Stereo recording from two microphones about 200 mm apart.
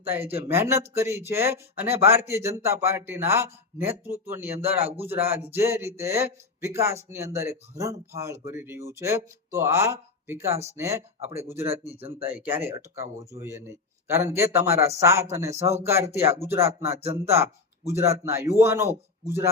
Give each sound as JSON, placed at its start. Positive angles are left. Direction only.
{"t": 0.0, "sound": "speech", "side_deg": -10}
{"t": 11.9, "sound": "speech", "side_deg": -30}
{"t": 12.3, "sound": "speech", "side_deg": -10}
{"t": 16.8, "sound": "speech", "side_deg": -30}
{"t": 17.1, "sound": "speech", "side_deg": -15}